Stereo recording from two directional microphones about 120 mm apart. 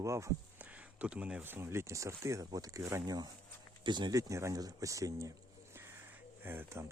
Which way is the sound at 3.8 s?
40° right (ahead or behind).